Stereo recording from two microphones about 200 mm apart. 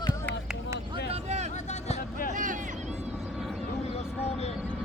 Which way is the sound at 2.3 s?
40° right (ahead or behind).